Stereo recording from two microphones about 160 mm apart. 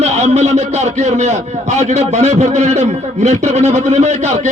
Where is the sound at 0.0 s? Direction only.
45° right (ahead or behind).